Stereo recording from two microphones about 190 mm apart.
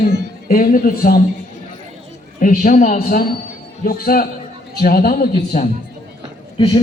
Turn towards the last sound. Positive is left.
turn(degrees=25)  # may be behind; listen again after turning